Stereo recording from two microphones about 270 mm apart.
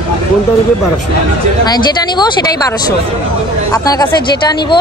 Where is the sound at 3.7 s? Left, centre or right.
Centre.